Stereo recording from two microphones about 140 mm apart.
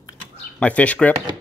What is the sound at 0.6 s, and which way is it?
Speech, 10° left (ahead or behind).